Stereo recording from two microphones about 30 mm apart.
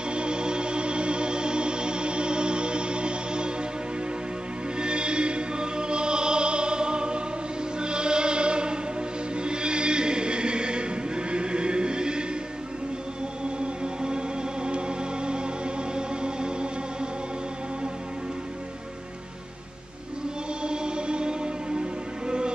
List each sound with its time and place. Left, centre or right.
0.1 s music: right
4.7 s music: right
9.4 s choir: right
13.6 s music: right
20.6 s music: right